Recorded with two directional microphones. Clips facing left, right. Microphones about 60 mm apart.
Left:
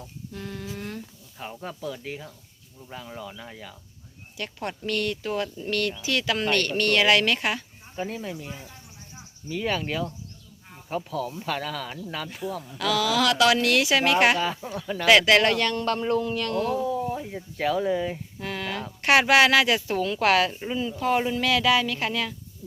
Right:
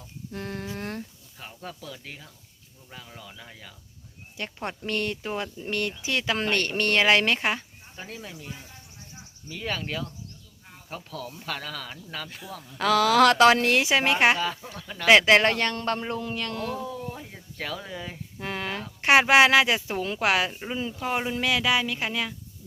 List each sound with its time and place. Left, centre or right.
0.3 s a sound: right
1.4 s speech: centre
4.4 s speech: right
7.9 s speech: centre
12.8 s a woman's voice: right
14.3 s speech: centre
15.0 s a woman's voice: right
16.6 s speech: centre
18.3 s speech: right